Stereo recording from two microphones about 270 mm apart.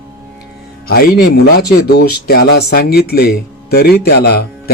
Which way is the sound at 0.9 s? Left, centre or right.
Left.